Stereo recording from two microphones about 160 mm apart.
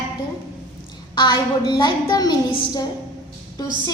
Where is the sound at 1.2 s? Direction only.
25° left (ahead or behind).